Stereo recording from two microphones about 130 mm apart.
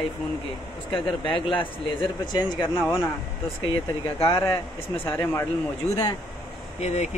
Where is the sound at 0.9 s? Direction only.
40° left (ahead or behind).